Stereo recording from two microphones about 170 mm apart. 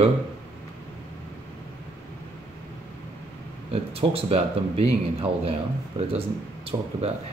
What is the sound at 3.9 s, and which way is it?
Speech, 35° right (ahead or behind).